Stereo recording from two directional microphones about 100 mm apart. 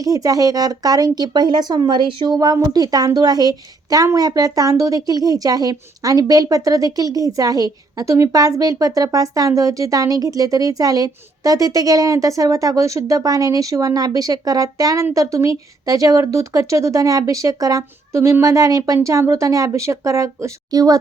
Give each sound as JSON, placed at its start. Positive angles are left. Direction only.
{"t": 0.0, "sound": "a woman's voice", "side_deg": -35}